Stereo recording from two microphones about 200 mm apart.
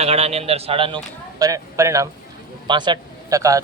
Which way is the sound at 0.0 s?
30° right (ahead or behind).